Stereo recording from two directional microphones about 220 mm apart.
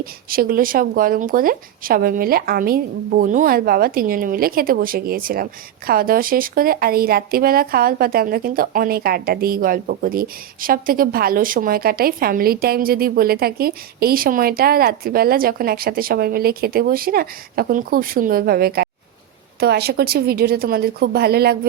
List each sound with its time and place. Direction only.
0.0 s a woman's voice: 40° right (ahead or behind)